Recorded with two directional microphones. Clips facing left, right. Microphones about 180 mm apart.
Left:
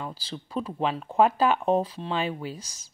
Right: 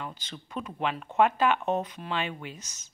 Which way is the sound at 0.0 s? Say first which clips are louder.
Left 4 dB; 30° left (ahead or behind).